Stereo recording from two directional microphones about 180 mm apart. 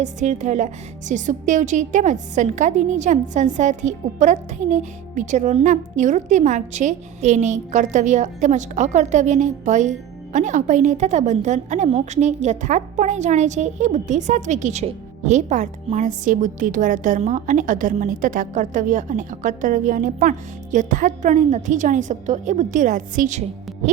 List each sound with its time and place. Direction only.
0.0 s a woman's voice: 40° right (ahead or behind)